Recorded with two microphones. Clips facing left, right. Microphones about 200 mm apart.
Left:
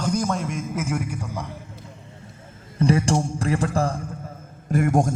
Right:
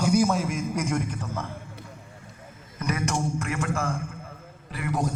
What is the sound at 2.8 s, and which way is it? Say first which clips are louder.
A man's voice: left 8 dB; 30° left (ahead or behind).